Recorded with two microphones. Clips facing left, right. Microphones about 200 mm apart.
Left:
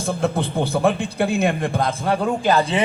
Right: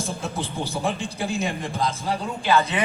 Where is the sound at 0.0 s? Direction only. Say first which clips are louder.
Left 7 dB; 60° left (ahead or behind).